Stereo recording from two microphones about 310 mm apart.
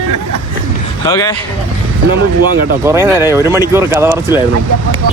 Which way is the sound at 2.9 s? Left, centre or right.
Centre.